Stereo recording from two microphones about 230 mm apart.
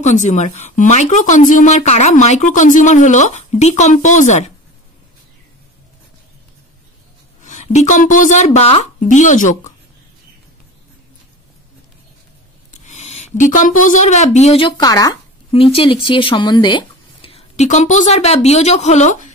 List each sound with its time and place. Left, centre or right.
0.0 s speech: left
7.4 s speech: left
12.8 s a sound: left
13.8 s a woman's voice: left